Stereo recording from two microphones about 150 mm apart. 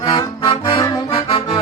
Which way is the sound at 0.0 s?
25° left (ahead or behind).